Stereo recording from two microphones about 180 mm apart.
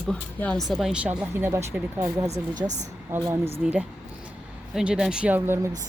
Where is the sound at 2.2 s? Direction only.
40° right (ahead or behind).